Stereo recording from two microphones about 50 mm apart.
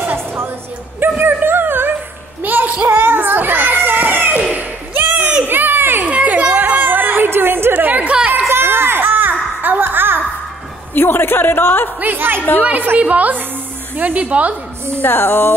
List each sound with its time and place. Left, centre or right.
0.9 s a sound: right
3.1 s children playing: right
4.6 s a sound: right
5.4 s baby cry: right
6.0 s children playing: right
8.5 s a sound: right
11.0 s a man's voice: left
12.0 s a woman's voice: right
15.0 s a man's voice: left